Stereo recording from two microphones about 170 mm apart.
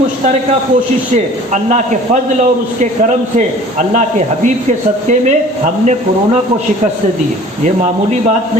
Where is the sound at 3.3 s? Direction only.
45° right (ahead or behind).